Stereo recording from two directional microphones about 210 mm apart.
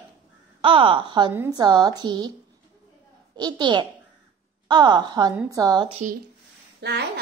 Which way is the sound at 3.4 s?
20° right (ahead or behind).